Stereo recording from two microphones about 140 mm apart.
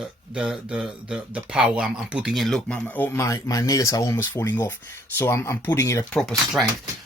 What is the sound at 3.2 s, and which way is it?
Speech, 20° left (ahead or behind).